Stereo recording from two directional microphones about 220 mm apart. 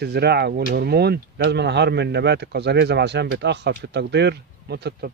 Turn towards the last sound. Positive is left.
turn(degrees=-50)  # may be behind; listen again after turning